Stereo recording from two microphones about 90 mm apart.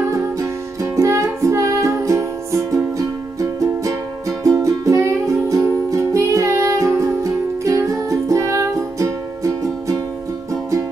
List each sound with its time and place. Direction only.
0.0 s music: 35° right (ahead or behind)